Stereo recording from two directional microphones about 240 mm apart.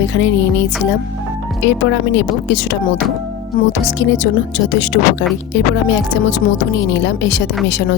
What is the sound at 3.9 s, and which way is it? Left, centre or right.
Speech, left.